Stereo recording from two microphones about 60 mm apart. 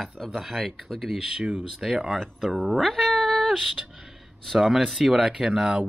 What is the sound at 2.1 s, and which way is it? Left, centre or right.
Speech, centre.